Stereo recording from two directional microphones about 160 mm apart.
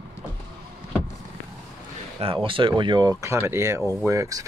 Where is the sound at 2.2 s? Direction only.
35° right (ahead or behind).